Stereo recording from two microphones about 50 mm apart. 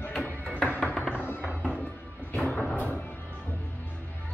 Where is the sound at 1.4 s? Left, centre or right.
Centre.